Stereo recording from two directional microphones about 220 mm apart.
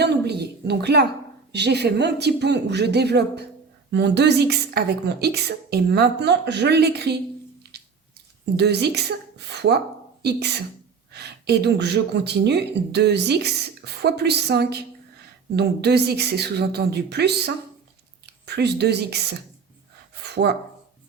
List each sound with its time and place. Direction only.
0.0 s a sound: 50° right (ahead or behind)
1.5 s speech: 50° right (ahead or behind)
7.6 s squish: 45° right (ahead or behind)
8.5 s speech: 50° right (ahead or behind)